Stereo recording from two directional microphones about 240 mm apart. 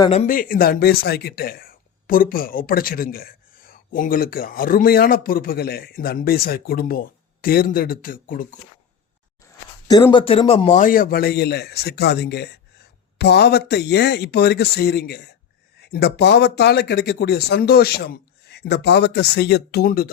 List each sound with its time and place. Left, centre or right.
0.0 s speech: left
9.8 s speech: centre; by 20.1 s left